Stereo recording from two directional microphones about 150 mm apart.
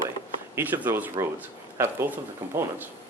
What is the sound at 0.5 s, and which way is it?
Speech, 10° right (ahead or behind).